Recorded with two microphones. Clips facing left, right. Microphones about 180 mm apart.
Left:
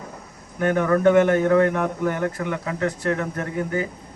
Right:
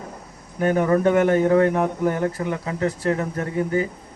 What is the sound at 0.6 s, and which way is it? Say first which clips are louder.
Speech: even; 30° right (ahead or behind).